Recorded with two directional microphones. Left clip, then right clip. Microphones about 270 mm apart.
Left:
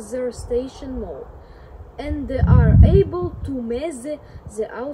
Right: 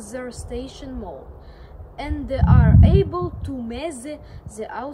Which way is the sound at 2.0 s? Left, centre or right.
Centre.